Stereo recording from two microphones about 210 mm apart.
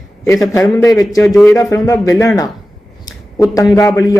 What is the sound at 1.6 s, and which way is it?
Speech, 15° left (ahead or behind).